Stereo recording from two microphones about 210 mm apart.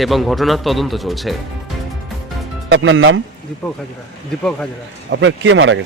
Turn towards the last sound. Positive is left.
turn(degrees=-65)  # may be behind; listen again after turning